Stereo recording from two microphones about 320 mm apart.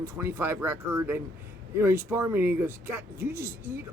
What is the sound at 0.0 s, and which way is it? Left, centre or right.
Speech, centre.